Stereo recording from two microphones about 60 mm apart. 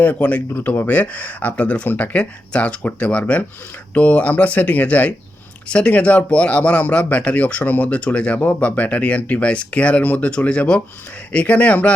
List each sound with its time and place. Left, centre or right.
0.0 s speech: left